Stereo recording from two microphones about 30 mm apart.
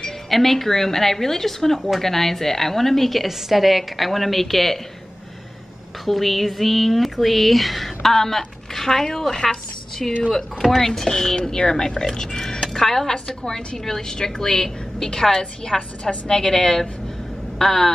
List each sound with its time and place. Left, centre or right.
0.3 s a woman's voice: centre
6.0 s speech: centre
10.3 s a woman's voice: centre
10.8 s a woman's voice: centre
12.2 s a sound: left
12.7 s a woman's voice: centre
13.4 s a woman's voice: left
13.8 s a woman's voice: centre